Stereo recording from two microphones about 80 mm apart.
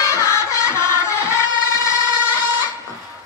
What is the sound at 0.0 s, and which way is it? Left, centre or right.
Music, left.